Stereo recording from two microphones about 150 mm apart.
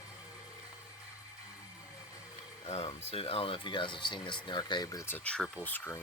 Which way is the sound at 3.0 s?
40° left (ahead or behind).